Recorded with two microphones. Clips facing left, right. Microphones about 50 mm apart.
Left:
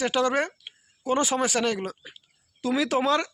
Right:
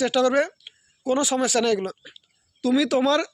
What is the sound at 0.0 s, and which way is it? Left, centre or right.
Speech, left.